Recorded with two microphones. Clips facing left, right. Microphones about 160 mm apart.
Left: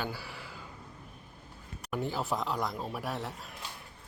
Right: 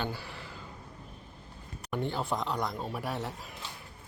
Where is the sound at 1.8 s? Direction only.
5° left (ahead or behind).